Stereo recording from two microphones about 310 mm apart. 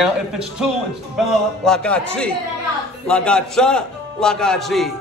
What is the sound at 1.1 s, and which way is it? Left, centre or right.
A man's voice, centre.